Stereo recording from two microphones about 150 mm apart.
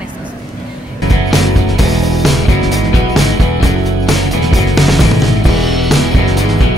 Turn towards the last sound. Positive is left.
turn(degrees=0)  # may be behind; listen again after turning